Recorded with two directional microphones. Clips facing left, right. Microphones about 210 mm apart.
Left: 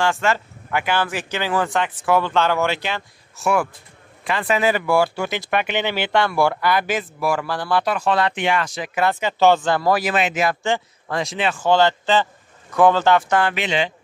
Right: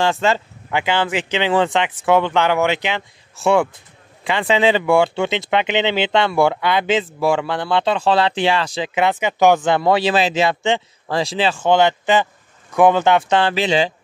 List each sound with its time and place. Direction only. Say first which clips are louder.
0.0 s speech: right 3 dB; 25° right (ahead or behind)